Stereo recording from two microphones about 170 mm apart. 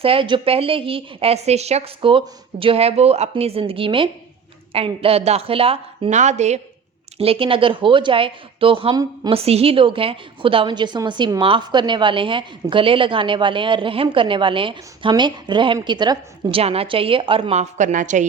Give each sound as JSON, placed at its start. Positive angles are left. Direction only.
{"t": 0.0, "sound": "a woman's voice", "side_deg": -30}
{"t": 9.4, "sound": "a woman's voice", "side_deg": -35}